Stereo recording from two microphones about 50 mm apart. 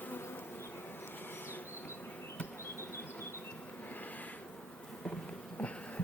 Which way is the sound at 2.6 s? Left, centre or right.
Left.